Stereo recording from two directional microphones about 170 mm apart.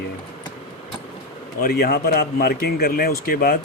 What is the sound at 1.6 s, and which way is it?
Speech, 65° left (ahead or behind).